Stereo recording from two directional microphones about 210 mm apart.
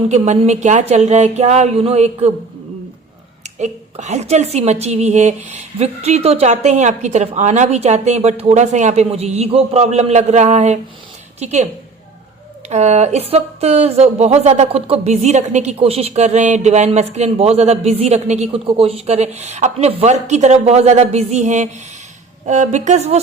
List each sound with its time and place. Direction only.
0.1 s speech: 35° right (ahead or behind)
3.4 s speech: 30° right (ahead or behind)